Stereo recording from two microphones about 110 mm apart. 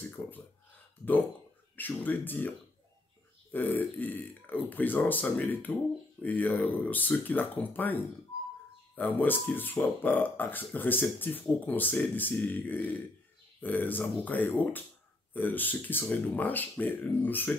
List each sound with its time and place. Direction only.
0.2 s speech: 15° left (ahead or behind)
1.8 s speech: 15° left (ahead or behind)
3.5 s speech: 15° left (ahead or behind)